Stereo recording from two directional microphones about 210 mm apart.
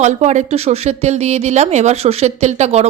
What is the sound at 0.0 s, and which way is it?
Speech, 35° right (ahead or behind).